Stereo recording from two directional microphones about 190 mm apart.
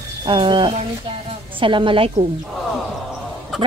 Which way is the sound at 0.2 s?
25° right (ahead or behind).